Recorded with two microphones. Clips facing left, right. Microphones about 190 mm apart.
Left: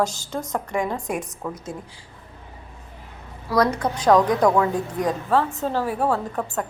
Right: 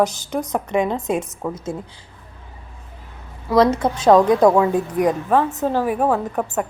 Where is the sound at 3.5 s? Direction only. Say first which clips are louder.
Right 5 dB; 25° right (ahead or behind).